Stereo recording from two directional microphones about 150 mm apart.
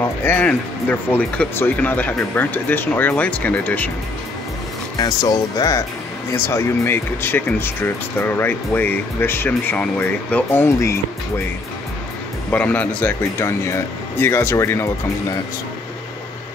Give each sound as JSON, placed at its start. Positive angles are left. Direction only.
{"t": 0.2, "sound": "speech", "side_deg": 10}
{"t": 4.9, "sound": "speech", "side_deg": 25}
{"t": 12.4, "sound": "speech", "side_deg": 10}